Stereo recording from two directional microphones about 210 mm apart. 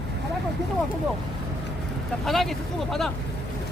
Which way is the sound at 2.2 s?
Centre (ahead or behind).